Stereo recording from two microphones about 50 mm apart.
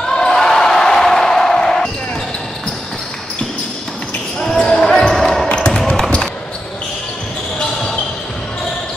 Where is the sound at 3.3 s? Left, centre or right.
Centre.